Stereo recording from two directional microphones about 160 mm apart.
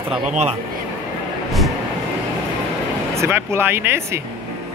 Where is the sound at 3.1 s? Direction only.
15° right (ahead or behind).